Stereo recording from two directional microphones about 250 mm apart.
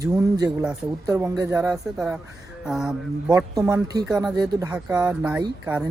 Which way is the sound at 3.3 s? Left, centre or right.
Centre.